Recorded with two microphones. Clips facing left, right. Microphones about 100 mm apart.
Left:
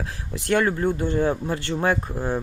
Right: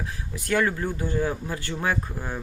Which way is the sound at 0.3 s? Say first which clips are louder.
Left 3 dB; 25° left (ahead or behind).